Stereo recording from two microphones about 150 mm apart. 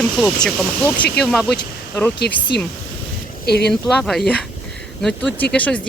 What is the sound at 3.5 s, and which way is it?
Speech, 90° left.